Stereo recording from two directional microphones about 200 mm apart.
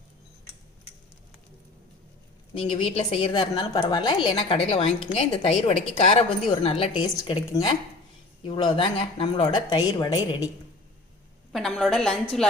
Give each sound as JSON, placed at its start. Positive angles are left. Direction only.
{"t": 2.6, "sound": "a woman's voice", "side_deg": 30}
{"t": 11.5, "sound": "a woman's voice", "side_deg": 0}